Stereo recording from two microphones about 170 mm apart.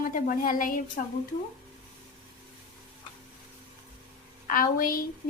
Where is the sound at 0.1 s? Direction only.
55° left (ahead or behind).